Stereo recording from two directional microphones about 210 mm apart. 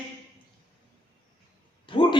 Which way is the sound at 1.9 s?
20° left (ahead or behind).